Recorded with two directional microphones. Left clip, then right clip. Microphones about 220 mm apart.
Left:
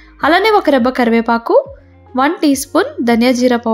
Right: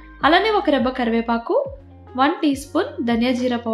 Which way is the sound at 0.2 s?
50° left (ahead or behind).